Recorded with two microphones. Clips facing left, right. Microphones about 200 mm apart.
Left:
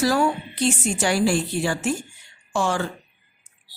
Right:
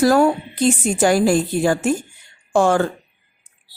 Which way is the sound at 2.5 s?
55° right (ahead or behind).